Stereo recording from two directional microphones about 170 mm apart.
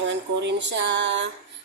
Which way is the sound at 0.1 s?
90° right.